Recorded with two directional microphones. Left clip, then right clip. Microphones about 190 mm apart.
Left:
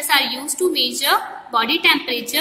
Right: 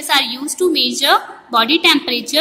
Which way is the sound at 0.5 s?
45° right (ahead or behind).